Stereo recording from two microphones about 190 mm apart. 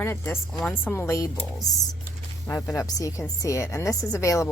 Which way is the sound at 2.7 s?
15° left (ahead or behind).